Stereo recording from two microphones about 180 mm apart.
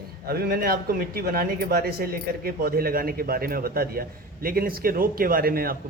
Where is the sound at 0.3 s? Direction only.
55° right (ahead or behind).